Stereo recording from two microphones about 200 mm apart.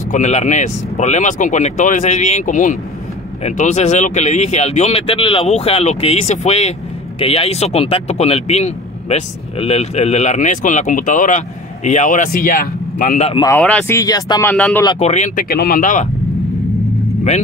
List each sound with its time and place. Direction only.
0.1 s a man's voice: 35° left (ahead or behind)
13.3 s speech: 20° left (ahead or behind)
13.6 s speech: 5° left (ahead or behind)
14.5 s speech: 5° left (ahead or behind)
15.0 s a man's voice: 35° left (ahead or behind)